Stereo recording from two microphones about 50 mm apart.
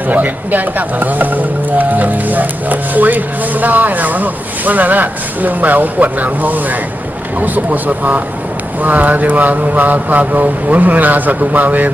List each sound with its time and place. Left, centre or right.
0.1 s speech: right